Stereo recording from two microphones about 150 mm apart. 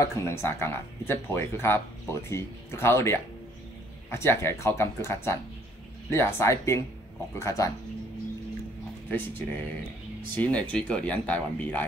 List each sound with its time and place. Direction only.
0.0 s speech: 20° left (ahead or behind)
9.1 s speech: 10° left (ahead or behind)